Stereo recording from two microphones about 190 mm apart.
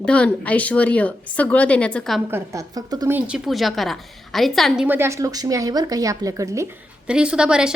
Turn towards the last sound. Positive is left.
turn(degrees=-5)  # may be behind; listen again after turning